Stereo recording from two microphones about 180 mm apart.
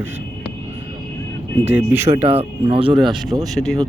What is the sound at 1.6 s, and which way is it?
Speech, 10° right (ahead or behind).